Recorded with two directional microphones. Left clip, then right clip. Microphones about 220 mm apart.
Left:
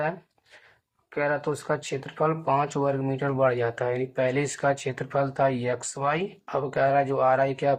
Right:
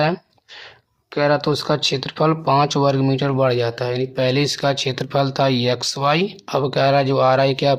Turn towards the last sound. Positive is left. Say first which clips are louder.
# right 6 dB
turn(degrees=-40)  # may be behind; listen again after turning